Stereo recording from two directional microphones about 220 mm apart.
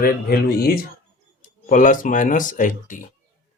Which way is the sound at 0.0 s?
45° left (ahead or behind).